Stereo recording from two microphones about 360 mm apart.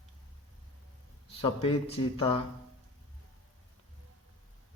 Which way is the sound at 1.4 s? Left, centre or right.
Centre.